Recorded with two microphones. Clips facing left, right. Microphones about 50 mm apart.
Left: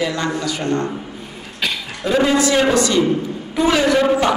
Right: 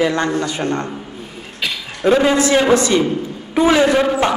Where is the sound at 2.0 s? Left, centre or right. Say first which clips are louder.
Right 2 dB; right.